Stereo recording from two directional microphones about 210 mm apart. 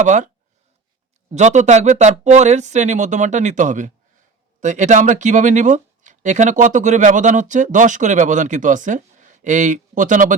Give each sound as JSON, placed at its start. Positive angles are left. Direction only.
{"t": 0.0, "sound": "speech", "side_deg": -35}
{"t": 1.3, "sound": "speech", "side_deg": -35}